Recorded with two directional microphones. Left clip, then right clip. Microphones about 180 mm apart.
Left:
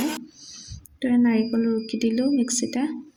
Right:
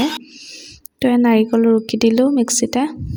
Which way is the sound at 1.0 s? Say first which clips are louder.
Right 8 dB; 55° right (ahead or behind).